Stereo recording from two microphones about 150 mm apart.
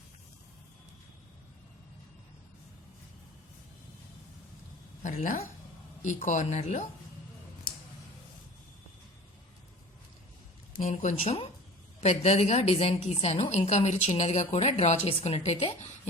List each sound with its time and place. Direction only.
5.0 s speech: 50° left (ahead or behind)
10.8 s speech: 50° left (ahead or behind)